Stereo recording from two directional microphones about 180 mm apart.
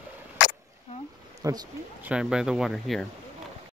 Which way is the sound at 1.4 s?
20° right (ahead or behind).